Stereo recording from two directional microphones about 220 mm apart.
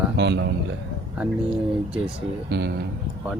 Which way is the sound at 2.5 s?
50° right (ahead or behind).